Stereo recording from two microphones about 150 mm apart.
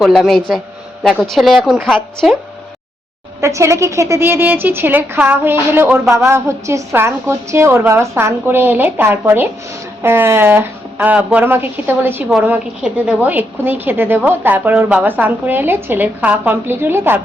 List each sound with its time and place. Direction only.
0.0 s a man's voice: centre (ahead or behind)
3.4 s a woman's voice: 20° right (ahead or behind)